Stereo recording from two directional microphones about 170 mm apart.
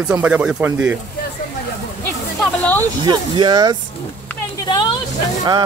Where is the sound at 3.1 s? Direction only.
25° right (ahead or behind).